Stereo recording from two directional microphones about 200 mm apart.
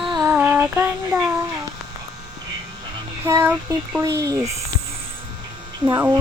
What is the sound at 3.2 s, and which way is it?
Speech, 10° right (ahead or behind).